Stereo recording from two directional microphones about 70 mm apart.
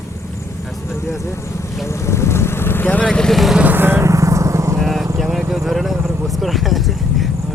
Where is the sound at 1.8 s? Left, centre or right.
Left.